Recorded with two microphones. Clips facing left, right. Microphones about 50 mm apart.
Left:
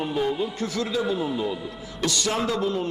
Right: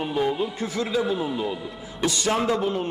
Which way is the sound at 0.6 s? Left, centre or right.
Right.